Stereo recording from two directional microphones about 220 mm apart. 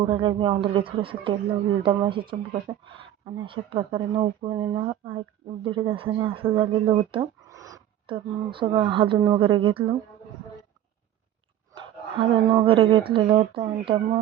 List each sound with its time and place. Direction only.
0.0 s speech: 25° right (ahead or behind)
11.7 s speech: 20° right (ahead or behind)